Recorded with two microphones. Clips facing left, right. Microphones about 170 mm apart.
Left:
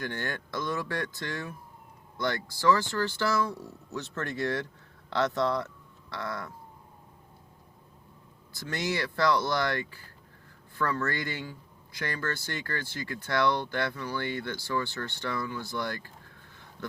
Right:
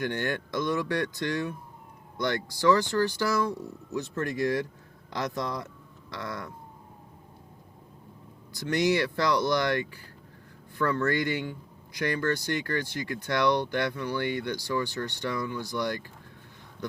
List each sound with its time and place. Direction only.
0.0 s speech: 15° right (ahead or behind)
8.7 s speech: 15° right (ahead or behind)
11.0 s speech: 20° right (ahead or behind)